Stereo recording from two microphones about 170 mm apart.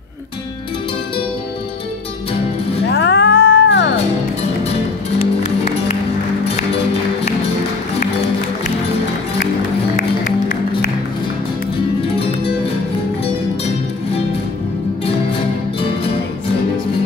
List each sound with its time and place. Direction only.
2.9 s music: 90° left
5.2 s music: 35° left (ahead or behind)
9.9 s music: 50° left (ahead or behind)